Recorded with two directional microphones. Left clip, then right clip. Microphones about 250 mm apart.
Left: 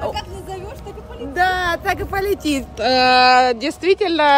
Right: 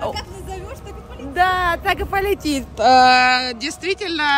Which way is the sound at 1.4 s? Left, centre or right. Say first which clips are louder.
Right 1 dB; centre.